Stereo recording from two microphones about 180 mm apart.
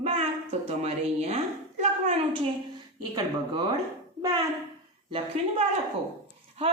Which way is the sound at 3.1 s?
20° right (ahead or behind).